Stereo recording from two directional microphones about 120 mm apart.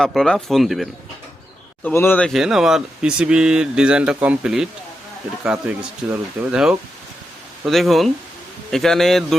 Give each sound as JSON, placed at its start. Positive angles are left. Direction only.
{"t": 0.0, "sound": "speech", "side_deg": 5}
{"t": 1.8, "sound": "speech", "side_deg": 15}
{"t": 2.2, "sound": "speech", "side_deg": -5}